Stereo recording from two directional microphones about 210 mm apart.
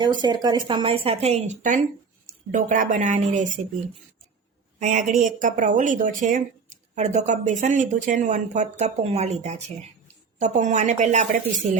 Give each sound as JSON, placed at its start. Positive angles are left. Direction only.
{"t": 0.0, "sound": "a woman's voice", "side_deg": -20}
{"t": 4.8, "sound": "speech", "side_deg": -35}